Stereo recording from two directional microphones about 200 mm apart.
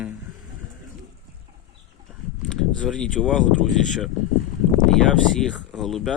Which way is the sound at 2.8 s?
5° left (ahead or behind).